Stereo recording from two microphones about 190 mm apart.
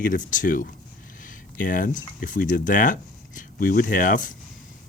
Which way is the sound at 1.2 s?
45° left (ahead or behind).